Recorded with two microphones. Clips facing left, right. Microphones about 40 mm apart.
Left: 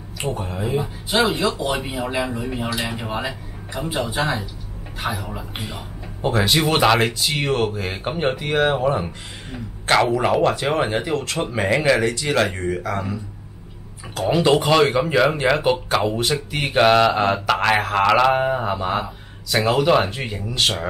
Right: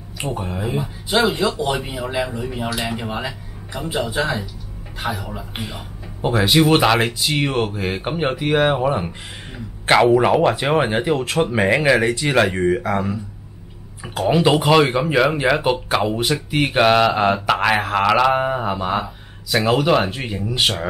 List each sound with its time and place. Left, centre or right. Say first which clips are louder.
0.2 s speech: even; centre
3.0 s speech: even; centre
6.2 s speech: right 3 dB; centre
10.1 s speech: right 3 dB; centre
14.3 s speech: right 2 dB; centre